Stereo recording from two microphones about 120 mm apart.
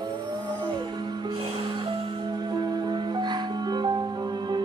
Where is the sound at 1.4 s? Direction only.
50° right (ahead or behind).